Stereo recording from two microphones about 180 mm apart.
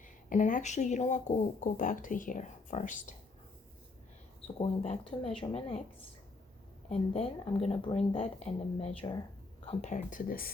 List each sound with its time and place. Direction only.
0.0 s speech: 45° left (ahead or behind)
4.4 s speech: 30° left (ahead or behind)
6.9 s speech: 35° left (ahead or behind); by 10.5 s 55° left (ahead or behind)